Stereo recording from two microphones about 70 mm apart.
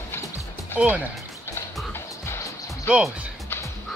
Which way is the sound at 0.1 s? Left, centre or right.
Left.